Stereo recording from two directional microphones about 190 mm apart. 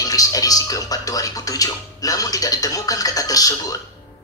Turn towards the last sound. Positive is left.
turn(degrees=20)  # may be behind; listen again after turning